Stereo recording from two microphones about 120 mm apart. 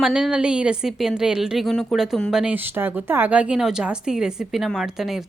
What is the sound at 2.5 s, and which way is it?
A woman's voice, 15° right (ahead or behind).